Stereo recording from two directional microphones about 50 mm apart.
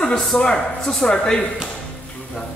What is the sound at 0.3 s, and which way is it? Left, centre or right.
A man's voice, centre.